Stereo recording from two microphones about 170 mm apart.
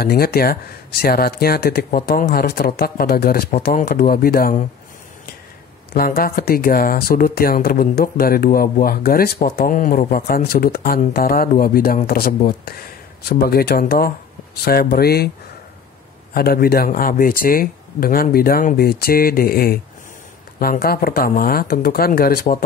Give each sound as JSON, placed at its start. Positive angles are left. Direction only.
{"t": 0.0, "sound": "speech", "side_deg": 65}
{"t": 5.9, "sound": "speech", "side_deg": 60}
{"t": 16.3, "sound": "speech", "side_deg": 65}